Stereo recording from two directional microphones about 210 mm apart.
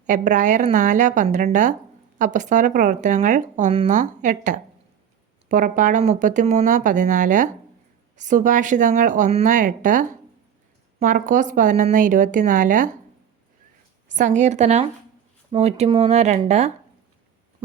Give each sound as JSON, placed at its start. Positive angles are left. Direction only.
{"t": 0.0, "sound": "speech", "side_deg": -35}
{"t": 14.1, "sound": "speech", "side_deg": -35}